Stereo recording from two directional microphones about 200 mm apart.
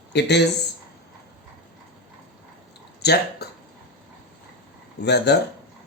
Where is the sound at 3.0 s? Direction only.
55° left (ahead or behind).